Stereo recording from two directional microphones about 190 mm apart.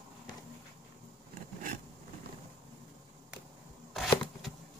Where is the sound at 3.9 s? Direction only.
Centre (ahead or behind).